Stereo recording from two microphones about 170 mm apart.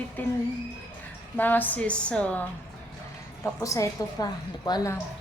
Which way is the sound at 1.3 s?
10° left (ahead or behind).